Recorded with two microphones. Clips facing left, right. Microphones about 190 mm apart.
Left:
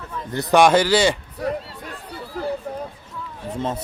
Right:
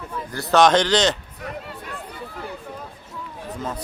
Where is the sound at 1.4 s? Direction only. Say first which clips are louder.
Left 10 dB; 35° left (ahead or behind).